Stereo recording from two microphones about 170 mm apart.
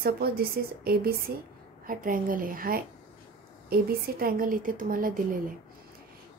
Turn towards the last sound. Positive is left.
turn(degrees=-55)  # may be behind; listen again after turning